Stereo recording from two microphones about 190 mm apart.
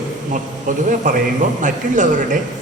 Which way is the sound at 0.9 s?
45° right (ahead or behind).